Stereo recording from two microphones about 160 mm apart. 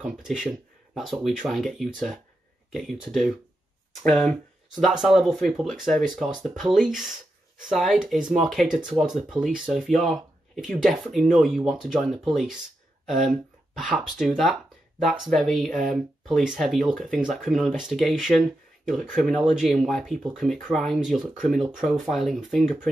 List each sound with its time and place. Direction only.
0.0 s speech: 5° right (ahead or behind)